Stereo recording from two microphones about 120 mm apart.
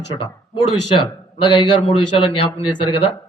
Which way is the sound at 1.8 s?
50° left (ahead or behind).